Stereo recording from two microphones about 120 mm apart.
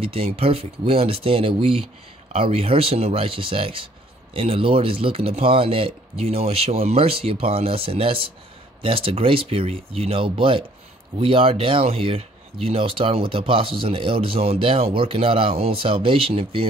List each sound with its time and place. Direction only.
0.0 s speech: 55° right (ahead or behind)